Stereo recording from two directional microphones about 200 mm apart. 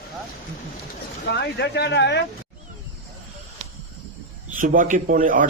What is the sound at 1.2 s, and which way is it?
Speech, 55° left (ahead or behind).